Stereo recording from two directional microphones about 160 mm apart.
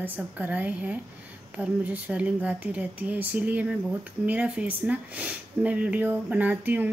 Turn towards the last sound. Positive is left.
turn(degrees=-10)  # may be behind; listen again after turning